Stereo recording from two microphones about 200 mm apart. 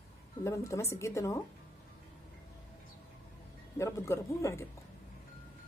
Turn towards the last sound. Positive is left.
turn(degrees=15)  # may be behind; listen again after turning